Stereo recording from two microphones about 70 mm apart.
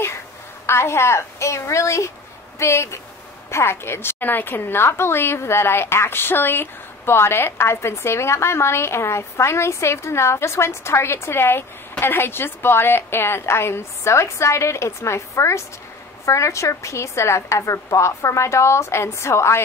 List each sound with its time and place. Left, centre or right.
0.7 s a woman's voice: left